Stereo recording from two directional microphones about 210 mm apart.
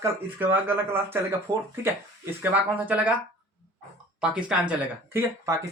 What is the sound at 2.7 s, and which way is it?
Speech, 5° right (ahead or behind).